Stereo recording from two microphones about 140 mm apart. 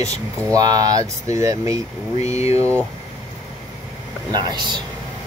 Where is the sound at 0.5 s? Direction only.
25° right (ahead or behind).